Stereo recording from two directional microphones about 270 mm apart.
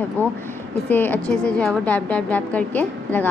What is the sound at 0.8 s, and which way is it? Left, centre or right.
Speech, centre.